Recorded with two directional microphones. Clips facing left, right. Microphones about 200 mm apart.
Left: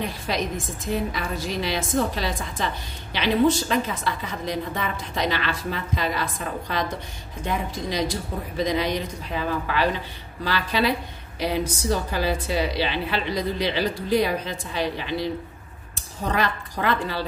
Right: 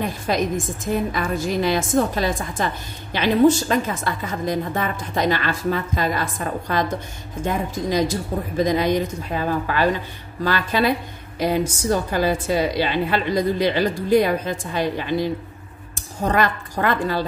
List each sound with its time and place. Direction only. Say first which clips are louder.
0.3 s a woman's voice: right 6 dB; 50° right (ahead or behind)
8.5 s a woman's voice: right 5 dB; 50° right (ahead or behind)